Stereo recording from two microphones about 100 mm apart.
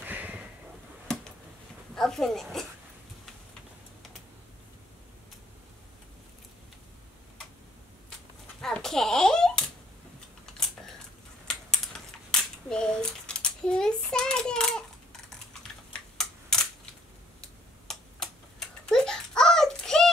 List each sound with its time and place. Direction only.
0.0 s a sound: 15° right (ahead or behind)
1.1 s a sound: 5° left (ahead or behind)
2.0 s speech: 5° left (ahead or behind)
8.5 s hands: 5° left (ahead or behind)
11.4 s typing: 5° left (ahead or behind)
16.2 s camera: 5° left (ahead or behind)
17.4 s typing: 5° left (ahead or behind)